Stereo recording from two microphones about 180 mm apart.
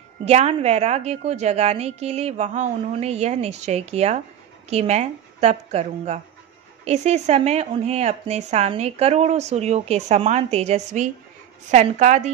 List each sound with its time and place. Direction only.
0.2 s speech: 35° right (ahead or behind)